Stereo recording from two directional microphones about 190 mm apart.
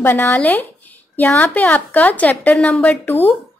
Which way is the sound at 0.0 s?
10° left (ahead or behind).